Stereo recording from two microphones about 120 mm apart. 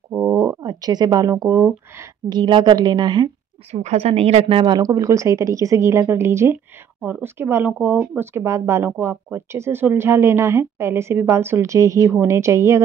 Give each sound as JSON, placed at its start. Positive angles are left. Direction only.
{"t": 0.2, "sound": "speech", "side_deg": -30}
{"t": 2.2, "sound": "a woman's voice", "side_deg": -40}
{"t": 3.7, "sound": "a woman's voice", "side_deg": -65}